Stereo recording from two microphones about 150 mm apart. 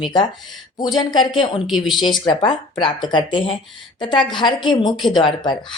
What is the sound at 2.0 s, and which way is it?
Speech, 30° left (ahead or behind).